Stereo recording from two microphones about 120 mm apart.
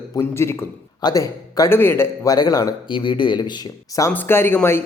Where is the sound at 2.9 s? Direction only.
45° left (ahead or behind).